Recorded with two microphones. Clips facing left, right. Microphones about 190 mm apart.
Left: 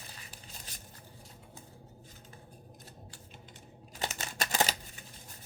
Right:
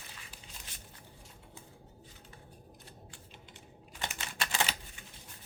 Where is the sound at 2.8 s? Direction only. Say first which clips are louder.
Left 1 dB; 40° left (ahead or behind).